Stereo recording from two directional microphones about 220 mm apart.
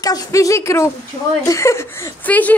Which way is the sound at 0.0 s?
15° left (ahead or behind).